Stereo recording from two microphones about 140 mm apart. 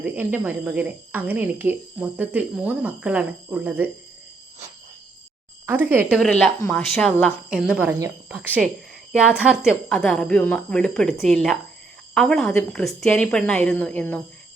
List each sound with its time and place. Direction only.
0.0 s speech: 10° right (ahead or behind)
5.6 s speech: 15° right (ahead or behind)
6.1 s a woman's voice: 5° left (ahead or behind)
6.6 s speech: 20° left (ahead or behind)
7.7 s a woman's voice: 10° right (ahead or behind); by 14.2 s 10° left (ahead or behind)